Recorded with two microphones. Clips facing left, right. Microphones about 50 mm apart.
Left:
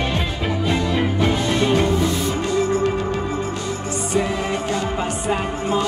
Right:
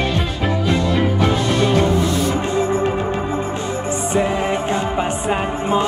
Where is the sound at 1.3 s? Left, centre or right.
Left.